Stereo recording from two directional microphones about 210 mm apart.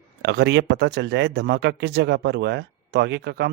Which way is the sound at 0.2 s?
55° right (ahead or behind).